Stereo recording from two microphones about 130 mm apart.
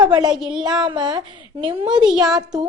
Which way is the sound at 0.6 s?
35° right (ahead or behind).